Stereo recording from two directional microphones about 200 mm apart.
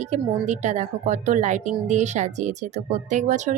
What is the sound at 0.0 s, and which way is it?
Speech, 35° right (ahead or behind).